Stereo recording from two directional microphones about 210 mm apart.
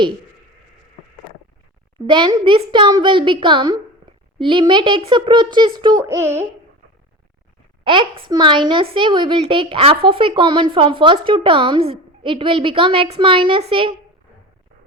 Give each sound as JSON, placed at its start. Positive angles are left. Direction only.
{"t": 2.0, "sound": "a woman's voice", "side_deg": -20}
{"t": 7.9, "sound": "a woman's voice", "side_deg": -25}